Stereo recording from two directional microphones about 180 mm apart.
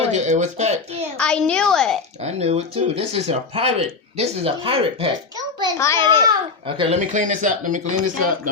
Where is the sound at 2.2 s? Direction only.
35° right (ahead or behind).